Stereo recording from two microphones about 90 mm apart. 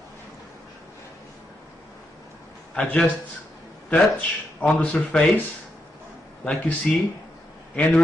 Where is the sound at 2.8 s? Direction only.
15° left (ahead or behind).